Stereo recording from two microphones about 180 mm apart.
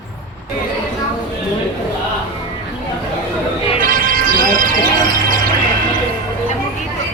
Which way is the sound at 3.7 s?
50° right (ahead or behind).